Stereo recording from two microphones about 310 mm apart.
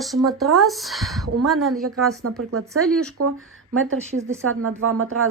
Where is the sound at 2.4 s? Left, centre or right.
Right.